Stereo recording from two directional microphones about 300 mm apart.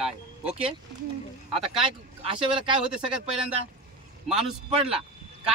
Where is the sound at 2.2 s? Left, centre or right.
Centre.